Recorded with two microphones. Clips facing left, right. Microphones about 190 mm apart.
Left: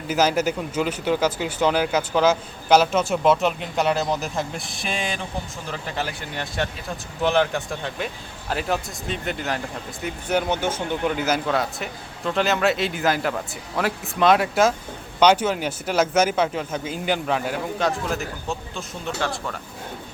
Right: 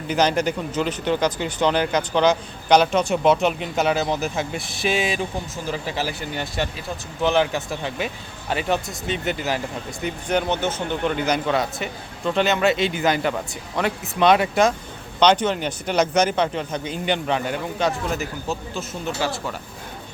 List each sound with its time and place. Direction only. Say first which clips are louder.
0.1 s speech: even; 5° left (ahead or behind)